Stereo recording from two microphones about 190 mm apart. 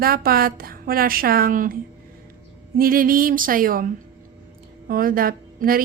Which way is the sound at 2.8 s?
50° right (ahead or behind).